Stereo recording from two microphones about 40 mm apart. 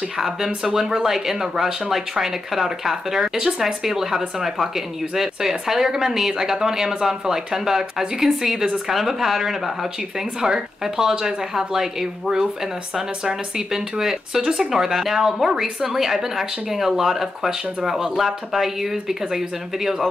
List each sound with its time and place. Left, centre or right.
0.7 s speech: centre